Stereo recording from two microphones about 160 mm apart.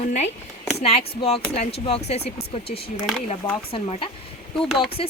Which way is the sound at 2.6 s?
80° left.